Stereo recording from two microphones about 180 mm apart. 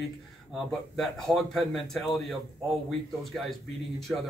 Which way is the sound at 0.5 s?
Centre (ahead or behind).